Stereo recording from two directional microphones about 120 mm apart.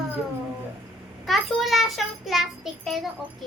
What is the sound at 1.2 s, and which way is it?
Child singing, centre (ahead or behind).